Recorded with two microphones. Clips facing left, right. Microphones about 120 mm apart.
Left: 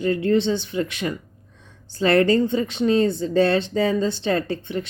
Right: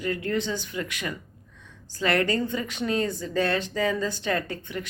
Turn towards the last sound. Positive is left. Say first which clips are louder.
# left 7 dB
turn(degrees=30)  # may be behind; listen again after turning